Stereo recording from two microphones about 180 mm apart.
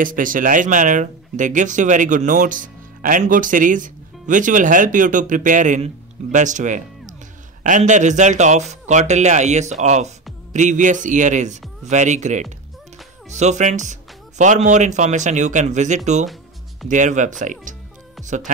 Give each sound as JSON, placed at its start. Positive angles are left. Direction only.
{"t": 0.0, "sound": "speech", "side_deg": -50}